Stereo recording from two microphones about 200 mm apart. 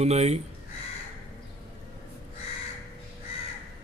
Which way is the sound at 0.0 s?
30° right (ahead or behind).